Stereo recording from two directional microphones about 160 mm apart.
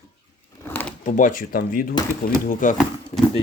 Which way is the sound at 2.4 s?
55° left (ahead or behind).